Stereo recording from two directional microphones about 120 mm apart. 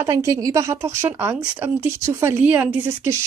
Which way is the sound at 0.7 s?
20° right (ahead or behind).